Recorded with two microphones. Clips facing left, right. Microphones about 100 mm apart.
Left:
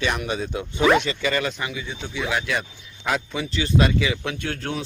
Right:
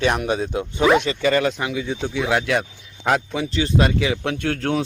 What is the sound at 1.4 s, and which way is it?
Speech, 65° right (ahead or behind).